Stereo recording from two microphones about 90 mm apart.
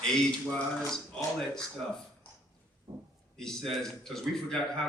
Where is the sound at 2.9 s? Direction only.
65° right (ahead or behind).